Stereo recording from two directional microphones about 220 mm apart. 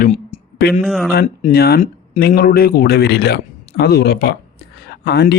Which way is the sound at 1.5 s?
45° left (ahead or behind).